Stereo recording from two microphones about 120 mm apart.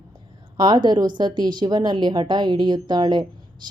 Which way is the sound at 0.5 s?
40° right (ahead or behind).